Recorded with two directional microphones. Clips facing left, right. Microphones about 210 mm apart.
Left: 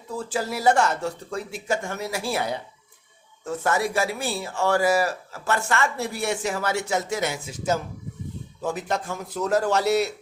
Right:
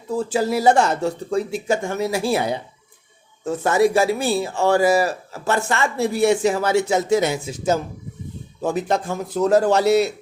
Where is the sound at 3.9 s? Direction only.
35° right (ahead or behind).